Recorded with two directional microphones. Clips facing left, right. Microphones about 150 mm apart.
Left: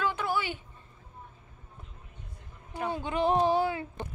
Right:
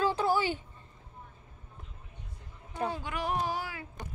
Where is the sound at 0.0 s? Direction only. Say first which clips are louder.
Right 3 dB; 35° right (ahead or behind).